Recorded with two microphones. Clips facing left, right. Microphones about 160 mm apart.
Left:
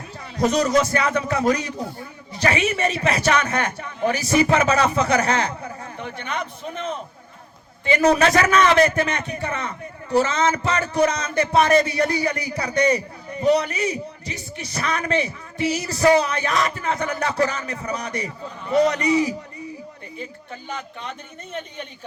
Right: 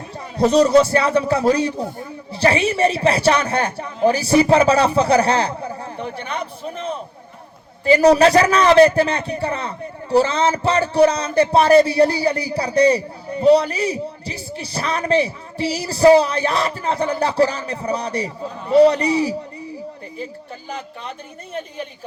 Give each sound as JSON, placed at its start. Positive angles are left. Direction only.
{"t": 0.2, "sound": "a man's voice", "side_deg": -30}
{"t": 20.7, "sound": "a man's voice", "side_deg": -35}